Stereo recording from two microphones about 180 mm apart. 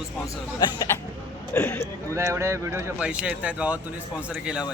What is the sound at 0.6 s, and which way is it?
Speech, 25° left (ahead or behind).